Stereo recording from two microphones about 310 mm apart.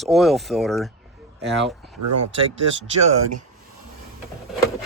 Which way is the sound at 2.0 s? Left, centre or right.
Right.